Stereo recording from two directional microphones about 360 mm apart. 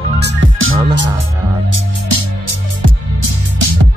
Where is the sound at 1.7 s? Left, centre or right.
Right.